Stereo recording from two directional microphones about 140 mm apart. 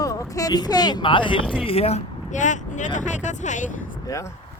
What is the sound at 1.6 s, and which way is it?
Speech, 45° left (ahead or behind).